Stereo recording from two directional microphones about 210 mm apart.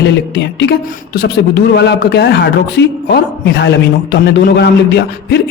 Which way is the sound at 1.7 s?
50° left (ahead or behind).